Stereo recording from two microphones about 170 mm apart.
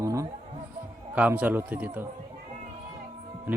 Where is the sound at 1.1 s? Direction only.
10° right (ahead or behind).